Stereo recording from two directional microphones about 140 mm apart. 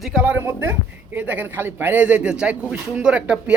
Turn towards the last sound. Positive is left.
turn(degrees=-10)  # may be behind; listen again after turning